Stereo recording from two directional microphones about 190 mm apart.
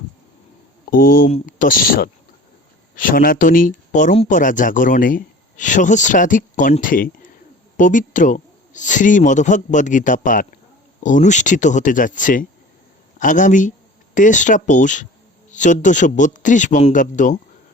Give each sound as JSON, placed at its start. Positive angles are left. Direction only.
{"t": 0.9, "sound": "speech", "side_deg": 50}